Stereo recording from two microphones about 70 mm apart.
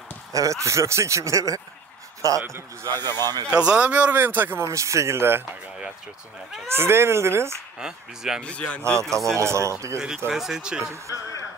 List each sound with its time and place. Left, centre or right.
0.3 s speech: right
2.9 s speech: right
3.4 s speech: centre
4.6 s speech: right
6.7 s speech: right
7.8 s speech: centre
8.4 s speech: centre
9.2 s speech: right
9.9 s speech: centre